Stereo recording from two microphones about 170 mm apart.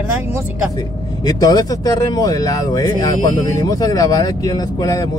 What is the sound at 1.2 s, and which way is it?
Speech, 20° left (ahead or behind).